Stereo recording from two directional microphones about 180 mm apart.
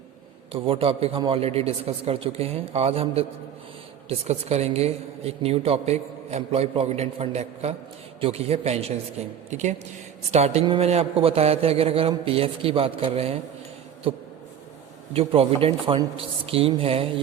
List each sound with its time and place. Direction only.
0.5 s a woman's voice: 30° right (ahead or behind)
15.1 s a woman's voice: 30° right (ahead or behind)